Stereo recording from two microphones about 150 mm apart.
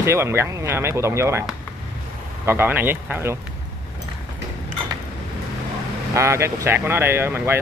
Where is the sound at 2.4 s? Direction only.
15° right (ahead or behind).